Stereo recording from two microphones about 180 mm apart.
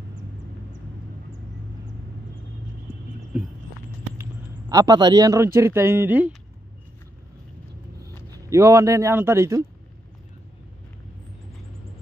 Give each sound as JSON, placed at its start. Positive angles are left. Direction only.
{"t": 4.2, "sound": "a man's voice", "side_deg": -20}
{"t": 8.3, "sound": "a man's voice", "side_deg": -15}